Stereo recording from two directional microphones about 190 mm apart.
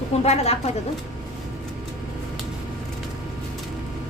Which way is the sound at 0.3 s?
35° left (ahead or behind).